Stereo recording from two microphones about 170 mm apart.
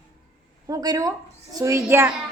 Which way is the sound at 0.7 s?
20° right (ahead or behind).